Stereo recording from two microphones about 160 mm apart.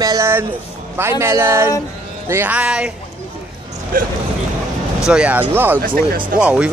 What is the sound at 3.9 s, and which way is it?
Speech, 60° right (ahead or behind).